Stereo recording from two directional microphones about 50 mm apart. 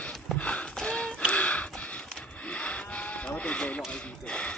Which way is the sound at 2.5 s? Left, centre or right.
Left.